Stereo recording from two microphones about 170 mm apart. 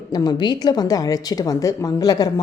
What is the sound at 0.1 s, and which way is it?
Speech, 25° left (ahead or behind).